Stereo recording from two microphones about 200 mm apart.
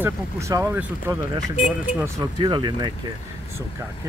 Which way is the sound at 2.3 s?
25° right (ahead or behind).